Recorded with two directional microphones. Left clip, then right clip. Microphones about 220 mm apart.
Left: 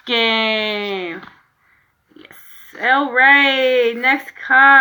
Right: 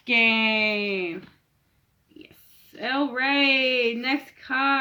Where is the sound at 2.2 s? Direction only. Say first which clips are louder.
Left 11 dB; 30° right (ahead or behind).